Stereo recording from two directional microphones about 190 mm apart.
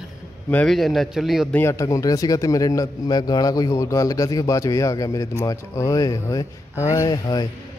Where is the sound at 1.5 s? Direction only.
15° left (ahead or behind).